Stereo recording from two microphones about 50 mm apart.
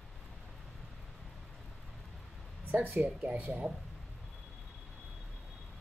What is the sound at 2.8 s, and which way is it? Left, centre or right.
Speech, right.